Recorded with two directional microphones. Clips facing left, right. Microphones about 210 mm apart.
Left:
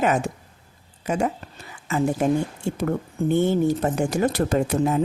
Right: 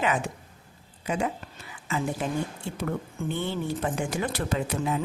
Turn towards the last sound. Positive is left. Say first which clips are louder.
# left 7 dB
turn(degrees=45)  # may be behind; listen again after turning